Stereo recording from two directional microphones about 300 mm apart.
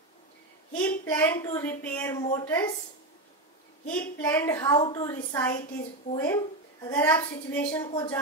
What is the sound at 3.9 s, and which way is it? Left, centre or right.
A woman's voice, centre.